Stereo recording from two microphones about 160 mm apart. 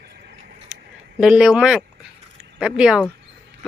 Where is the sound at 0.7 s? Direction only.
10° right (ahead or behind).